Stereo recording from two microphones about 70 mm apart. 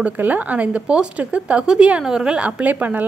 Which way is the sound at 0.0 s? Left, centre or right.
Right.